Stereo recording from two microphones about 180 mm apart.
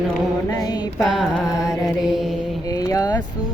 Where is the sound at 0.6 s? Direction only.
20° left (ahead or behind).